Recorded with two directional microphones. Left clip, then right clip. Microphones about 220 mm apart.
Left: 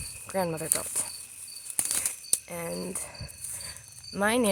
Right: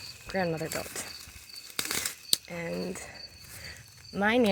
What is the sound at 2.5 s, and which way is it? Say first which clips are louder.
Speech: even; 10° left (ahead or behind).